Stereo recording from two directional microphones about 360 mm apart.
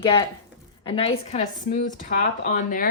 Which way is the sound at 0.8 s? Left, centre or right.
Centre.